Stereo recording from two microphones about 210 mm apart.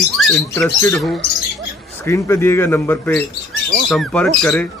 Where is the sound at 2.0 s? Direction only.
15° left (ahead or behind).